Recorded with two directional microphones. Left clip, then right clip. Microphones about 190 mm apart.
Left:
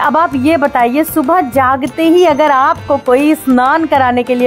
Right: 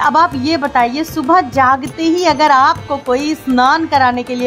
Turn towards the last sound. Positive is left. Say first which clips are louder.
# left 2 dB
turn(degrees=30)  # may be behind; listen again after turning